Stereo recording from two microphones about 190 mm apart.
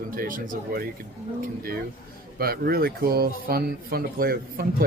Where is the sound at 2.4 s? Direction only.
50° right (ahead or behind).